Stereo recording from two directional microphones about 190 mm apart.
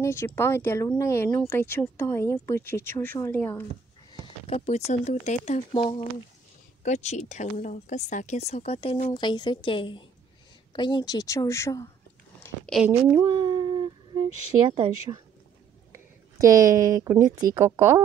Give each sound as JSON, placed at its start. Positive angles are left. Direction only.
{"t": 0.0, "sound": "speech", "side_deg": 15}
{"t": 4.1, "sound": "a sound", "side_deg": 25}
{"t": 4.6, "sound": "speech", "side_deg": 35}
{"t": 6.8, "sound": "a woman's voice", "side_deg": 40}
{"t": 12.8, "sound": "speech", "side_deg": -10}
{"t": 13.3, "sound": "humming", "side_deg": -25}
{"t": 14.7, "sound": "a woman's voice", "side_deg": -20}